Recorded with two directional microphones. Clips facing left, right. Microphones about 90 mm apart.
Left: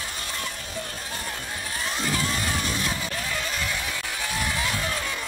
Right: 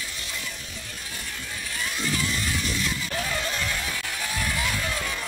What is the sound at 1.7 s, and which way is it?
Vehicle, 40° left (ahead or behind).